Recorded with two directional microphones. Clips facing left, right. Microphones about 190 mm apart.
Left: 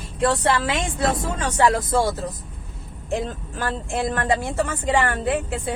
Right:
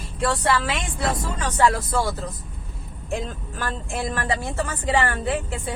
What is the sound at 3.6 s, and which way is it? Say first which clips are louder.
A woman's voice: left 3 dB; 20° left (ahead or behind).